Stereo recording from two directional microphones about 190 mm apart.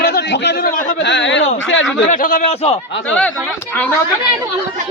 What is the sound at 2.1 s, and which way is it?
Speech, 45° left (ahead or behind).